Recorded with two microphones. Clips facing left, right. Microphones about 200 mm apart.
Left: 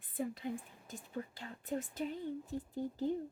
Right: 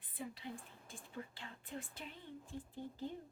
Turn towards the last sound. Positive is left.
turn(degrees=40)  # may be behind; listen again after turning